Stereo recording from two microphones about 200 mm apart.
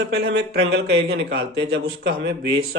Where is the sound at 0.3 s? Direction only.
55° right (ahead or behind).